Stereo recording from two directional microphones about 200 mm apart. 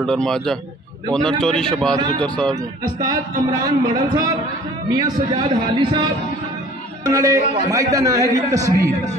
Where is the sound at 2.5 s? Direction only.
20° right (ahead or behind).